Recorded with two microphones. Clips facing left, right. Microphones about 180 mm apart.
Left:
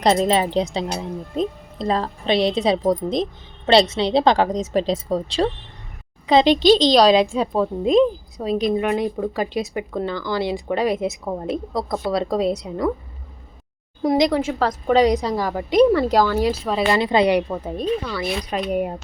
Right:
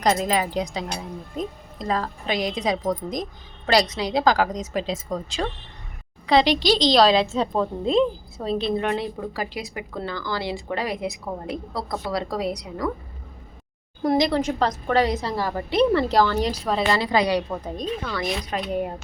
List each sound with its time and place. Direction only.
0.0 s speech: 30° left (ahead or behind)
6.2 s a child's voice: 20° left (ahead or behind)
9.3 s speech: 20° left (ahead or behind)
14.3 s a woman's voice: 10° left (ahead or behind)
16.9 s speech: 20° left (ahead or behind)
17.7 s a woman's voice: 10° left (ahead or behind)